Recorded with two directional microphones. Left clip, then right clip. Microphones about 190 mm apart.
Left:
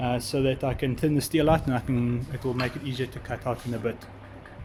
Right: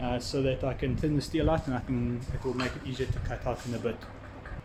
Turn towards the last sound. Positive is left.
turn(degrees=25)  # may be behind; listen again after turning